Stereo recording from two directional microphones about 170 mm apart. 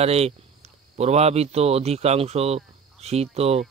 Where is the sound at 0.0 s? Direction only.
35° right (ahead or behind).